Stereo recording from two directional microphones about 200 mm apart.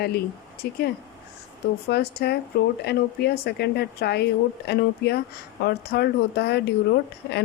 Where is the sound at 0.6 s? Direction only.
50° left (ahead or behind).